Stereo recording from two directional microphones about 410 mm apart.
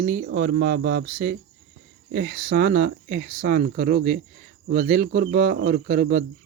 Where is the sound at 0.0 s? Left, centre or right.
Right.